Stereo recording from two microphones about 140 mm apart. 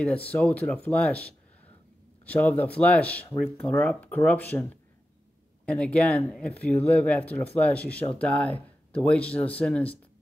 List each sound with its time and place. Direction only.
0.0 s speech: 10° left (ahead or behind)
5.7 s speech: 10° left (ahead or behind)